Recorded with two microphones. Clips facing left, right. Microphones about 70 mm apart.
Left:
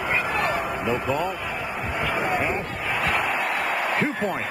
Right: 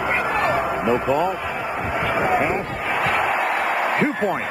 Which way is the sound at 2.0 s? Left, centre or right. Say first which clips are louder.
Right 4 dB; centre.